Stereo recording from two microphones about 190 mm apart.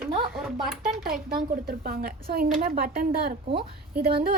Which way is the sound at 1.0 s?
50° right (ahead or behind).